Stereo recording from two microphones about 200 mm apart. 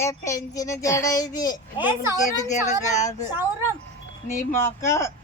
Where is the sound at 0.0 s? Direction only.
15° left (ahead or behind).